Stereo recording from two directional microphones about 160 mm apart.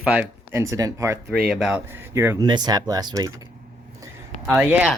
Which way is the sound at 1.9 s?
15° right (ahead or behind).